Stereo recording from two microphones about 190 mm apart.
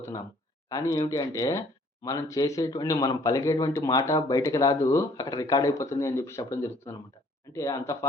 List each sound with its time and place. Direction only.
0.0 s speech: 20° left (ahead or behind)